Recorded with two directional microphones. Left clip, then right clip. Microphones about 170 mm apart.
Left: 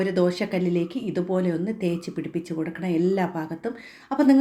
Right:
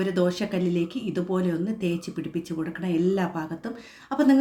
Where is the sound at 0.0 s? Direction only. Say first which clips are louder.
Left 2 dB; 15° left (ahead or behind).